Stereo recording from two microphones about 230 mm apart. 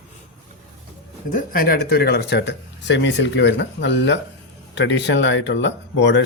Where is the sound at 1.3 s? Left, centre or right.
Left.